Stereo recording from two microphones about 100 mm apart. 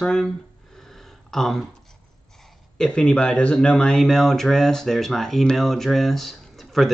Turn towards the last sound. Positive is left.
turn(degrees=0)  # may be behind; listen again after turning